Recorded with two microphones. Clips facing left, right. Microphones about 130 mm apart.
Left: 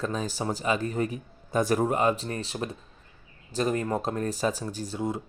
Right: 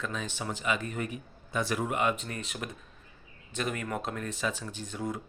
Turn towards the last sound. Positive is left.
turn(degrees=35)  # may be behind; listen again after turning